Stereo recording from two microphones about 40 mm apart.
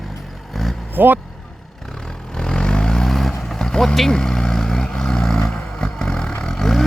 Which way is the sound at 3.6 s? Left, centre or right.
Centre.